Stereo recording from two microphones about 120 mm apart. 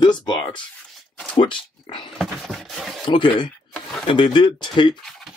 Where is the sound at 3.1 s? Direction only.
45° left (ahead or behind).